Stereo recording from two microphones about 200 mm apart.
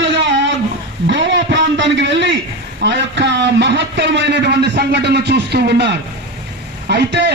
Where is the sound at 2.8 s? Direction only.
60° right (ahead or behind).